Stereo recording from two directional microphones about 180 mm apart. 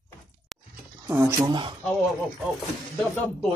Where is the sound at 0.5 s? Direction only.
Centre (ahead or behind).